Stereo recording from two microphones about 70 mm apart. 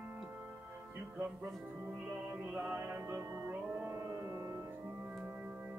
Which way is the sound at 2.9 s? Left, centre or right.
Right.